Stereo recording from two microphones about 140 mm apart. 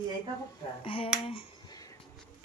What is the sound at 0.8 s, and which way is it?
Speech, 40° left (ahead or behind).